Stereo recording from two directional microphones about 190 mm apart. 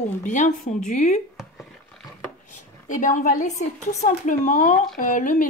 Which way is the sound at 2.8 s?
45° left (ahead or behind).